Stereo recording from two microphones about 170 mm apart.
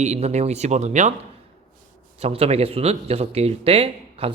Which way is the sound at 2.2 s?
35° right (ahead or behind).